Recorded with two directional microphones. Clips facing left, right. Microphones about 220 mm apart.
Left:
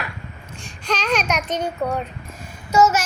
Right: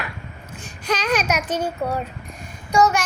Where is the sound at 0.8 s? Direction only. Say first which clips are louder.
Right 1 dB; 10° right (ahead or behind).